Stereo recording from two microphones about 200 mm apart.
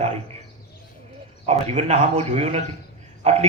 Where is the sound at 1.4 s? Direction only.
30° right (ahead or behind).